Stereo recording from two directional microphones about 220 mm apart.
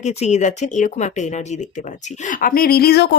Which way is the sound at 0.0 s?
30° left (ahead or behind).